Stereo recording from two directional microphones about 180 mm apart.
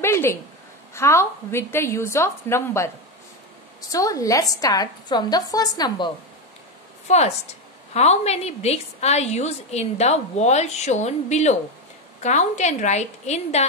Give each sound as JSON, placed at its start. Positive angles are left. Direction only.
{"t": 0.0, "sound": "a sound", "side_deg": 15}
{"t": 0.9, "sound": "a woman's voice", "side_deg": 15}
{"t": 3.9, "sound": "a woman's voice", "side_deg": 20}
{"t": 7.1, "sound": "a woman's voice", "side_deg": 40}